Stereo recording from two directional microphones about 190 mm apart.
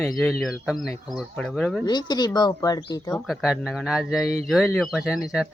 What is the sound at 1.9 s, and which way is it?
Speech, 20° left (ahead or behind).